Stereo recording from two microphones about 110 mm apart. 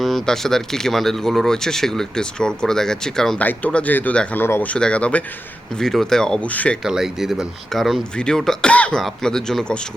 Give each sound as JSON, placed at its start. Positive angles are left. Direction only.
{"t": 0.0, "sound": "speech", "side_deg": 0}
{"t": 4.4, "sound": "speech", "side_deg": 20}
{"t": 4.7, "sound": "speech", "side_deg": 10}
{"t": 6.8, "sound": "speech", "side_deg": -5}